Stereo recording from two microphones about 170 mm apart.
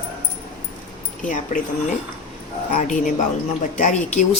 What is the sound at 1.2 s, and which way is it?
Speech, 50° left (ahead or behind).